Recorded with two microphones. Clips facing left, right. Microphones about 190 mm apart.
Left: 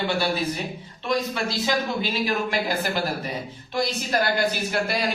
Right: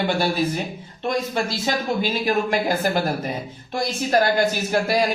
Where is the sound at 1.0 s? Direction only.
50° right (ahead or behind).